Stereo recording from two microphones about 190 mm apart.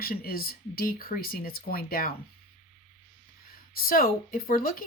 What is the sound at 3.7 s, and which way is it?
Speech, 50° left (ahead or behind).